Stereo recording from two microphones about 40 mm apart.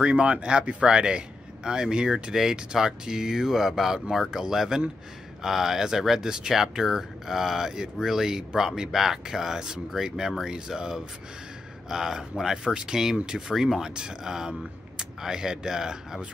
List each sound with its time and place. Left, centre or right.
0.0 s speech: right